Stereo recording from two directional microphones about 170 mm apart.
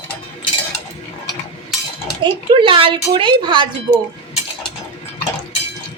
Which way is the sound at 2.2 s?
30° right (ahead or behind).